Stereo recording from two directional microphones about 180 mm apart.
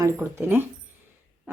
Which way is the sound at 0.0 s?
15° right (ahead or behind).